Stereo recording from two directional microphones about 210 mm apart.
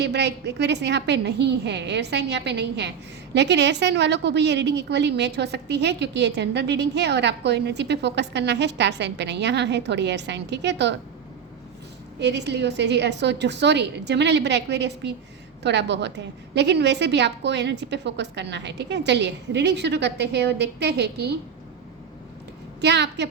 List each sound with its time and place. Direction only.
0.0 s a woman's voice: 55° right (ahead or behind)
12.2 s a woman's voice: 55° right (ahead or behind)
22.8 s a woman's voice: 55° right (ahead or behind)